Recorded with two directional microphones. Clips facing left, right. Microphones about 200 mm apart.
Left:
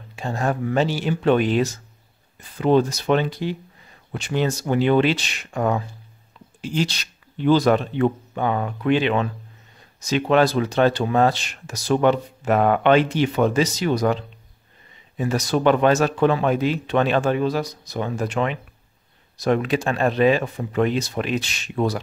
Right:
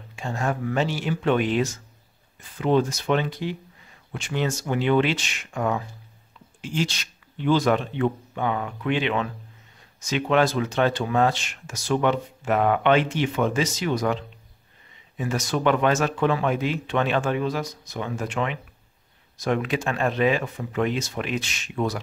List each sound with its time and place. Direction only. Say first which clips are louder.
0.1 s speech: left 3 dB; 35° left (ahead or behind)